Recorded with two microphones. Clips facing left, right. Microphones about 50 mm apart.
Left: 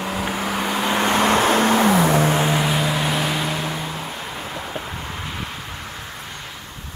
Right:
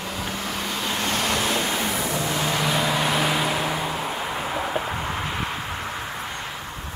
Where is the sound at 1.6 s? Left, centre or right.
Left.